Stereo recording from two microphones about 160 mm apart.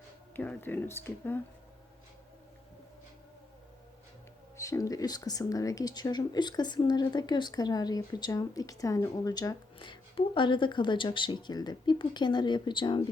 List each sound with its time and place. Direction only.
0.3 s speech: 10° left (ahead or behind)
4.5 s speech: 20° left (ahead or behind)